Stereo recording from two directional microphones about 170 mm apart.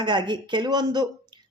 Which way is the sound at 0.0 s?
25° right (ahead or behind).